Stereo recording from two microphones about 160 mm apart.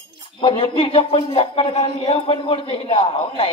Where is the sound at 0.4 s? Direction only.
35° left (ahead or behind).